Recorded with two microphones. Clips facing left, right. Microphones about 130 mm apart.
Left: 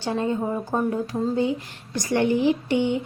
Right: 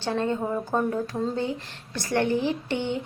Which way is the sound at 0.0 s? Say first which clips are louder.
Left 2 dB; 10° left (ahead or behind).